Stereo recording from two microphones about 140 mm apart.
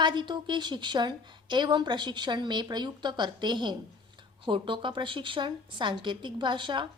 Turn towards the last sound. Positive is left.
turn(degrees=-35)  # may be behind; listen again after turning